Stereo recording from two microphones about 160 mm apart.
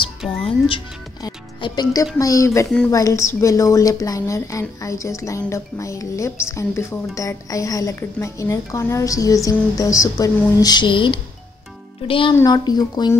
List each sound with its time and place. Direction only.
0.2 s music: 5° right (ahead or behind)
0.7 s a woman's voice: 30° left (ahead or behind)